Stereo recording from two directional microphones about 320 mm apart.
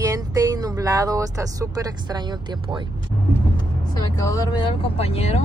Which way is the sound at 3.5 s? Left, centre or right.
Centre.